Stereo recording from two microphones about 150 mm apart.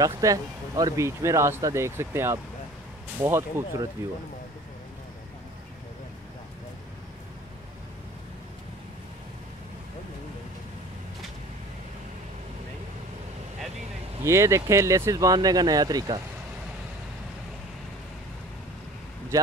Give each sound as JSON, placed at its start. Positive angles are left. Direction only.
{"t": 0.0, "sound": "speech", "side_deg": -20}
{"t": 14.2, "sound": "speech", "side_deg": -20}